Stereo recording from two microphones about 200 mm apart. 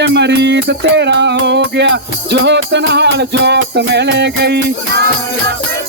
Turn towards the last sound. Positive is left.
turn(degrees=-55)  # may be behind; listen again after turning